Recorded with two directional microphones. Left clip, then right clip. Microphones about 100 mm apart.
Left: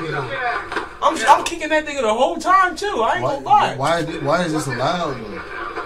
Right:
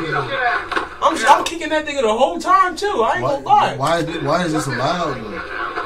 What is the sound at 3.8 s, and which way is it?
Speech, 20° left (ahead or behind).